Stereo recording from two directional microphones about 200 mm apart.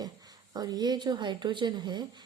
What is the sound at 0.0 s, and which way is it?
A woman's voice, 20° right (ahead or behind).